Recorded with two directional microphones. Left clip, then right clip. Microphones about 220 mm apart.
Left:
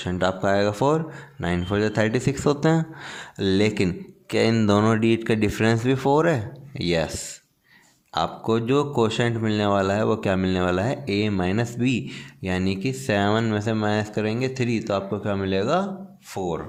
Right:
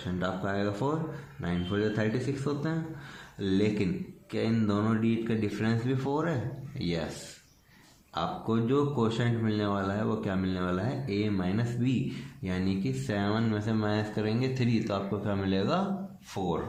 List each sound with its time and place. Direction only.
0.0 s speech: 45° left (ahead or behind)
8.1 s speech: 45° left (ahead or behind)